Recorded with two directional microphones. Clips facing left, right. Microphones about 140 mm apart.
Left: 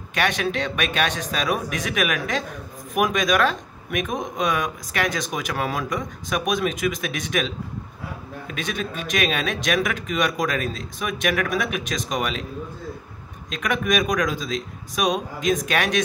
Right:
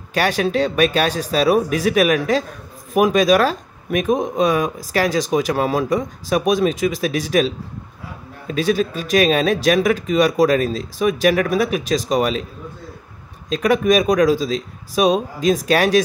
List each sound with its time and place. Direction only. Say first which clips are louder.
0.1 s speech: right 5 dB; 35° right (ahead or behind)
13.5 s speech: right 8 dB; 30° right (ahead or behind)